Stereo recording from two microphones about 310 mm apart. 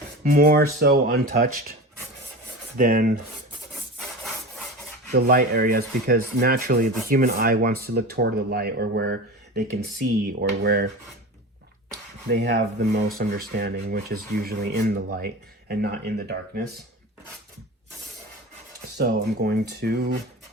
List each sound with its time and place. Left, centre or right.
0.3 s rub: right
2.7 s rub: right
5.1 s rub: right
10.2 s rub: right
12.3 s speech: right
18.9 s speech: right